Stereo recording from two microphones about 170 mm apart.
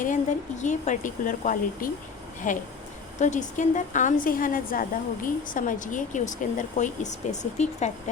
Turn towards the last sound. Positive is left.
turn(degrees=40)  # may be behind; listen again after turning